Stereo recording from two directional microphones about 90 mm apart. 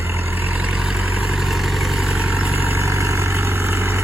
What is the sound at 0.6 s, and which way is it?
Vehicle, 5° right (ahead or behind).